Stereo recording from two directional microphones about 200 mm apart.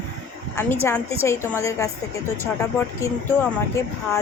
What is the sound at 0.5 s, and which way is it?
Speech, 10° left (ahead or behind).